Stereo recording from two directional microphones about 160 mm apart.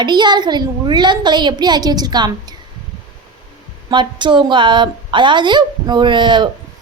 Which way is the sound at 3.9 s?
30° right (ahead or behind).